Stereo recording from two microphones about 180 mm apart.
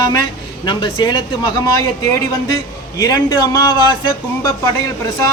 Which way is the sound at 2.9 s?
20° left (ahead or behind).